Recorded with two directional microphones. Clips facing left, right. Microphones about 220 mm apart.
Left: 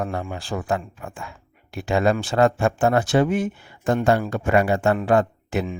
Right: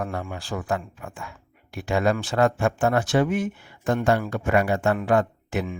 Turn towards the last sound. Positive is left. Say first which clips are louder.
# left 3 dB
turn(degrees=30)  # may be behind; listen again after turning